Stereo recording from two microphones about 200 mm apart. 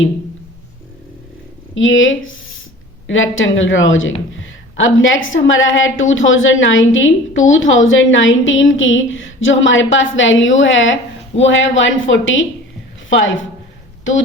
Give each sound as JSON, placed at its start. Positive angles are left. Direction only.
{"t": 1.7, "sound": "a woman's voice", "side_deg": 75}